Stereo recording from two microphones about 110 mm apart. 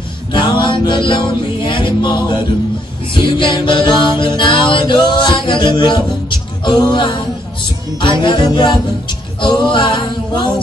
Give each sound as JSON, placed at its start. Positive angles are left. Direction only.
{"t": 0.3, "sound": "music", "side_deg": 45}
{"t": 3.2, "sound": "mantra", "side_deg": 45}
{"t": 8.0, "sound": "music", "side_deg": 50}
{"t": 9.4, "sound": "a capella", "side_deg": 45}